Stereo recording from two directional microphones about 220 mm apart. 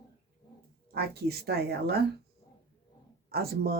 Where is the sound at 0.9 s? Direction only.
45° right (ahead or behind).